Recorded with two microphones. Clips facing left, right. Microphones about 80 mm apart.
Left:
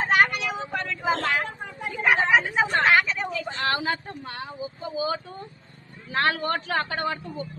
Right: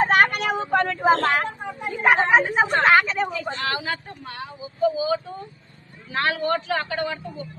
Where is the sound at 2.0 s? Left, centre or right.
Right.